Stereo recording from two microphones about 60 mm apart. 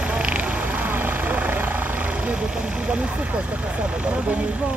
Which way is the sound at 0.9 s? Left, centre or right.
Right.